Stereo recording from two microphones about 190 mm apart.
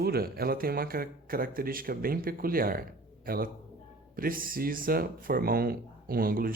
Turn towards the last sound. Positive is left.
turn(degrees=-50)  # may be behind; listen again after turning